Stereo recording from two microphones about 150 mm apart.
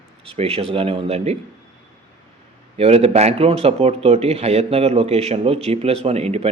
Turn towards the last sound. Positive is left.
turn(degrees=-45)  # may be behind; listen again after turning